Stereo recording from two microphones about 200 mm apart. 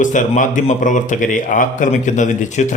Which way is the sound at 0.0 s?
40° left (ahead or behind).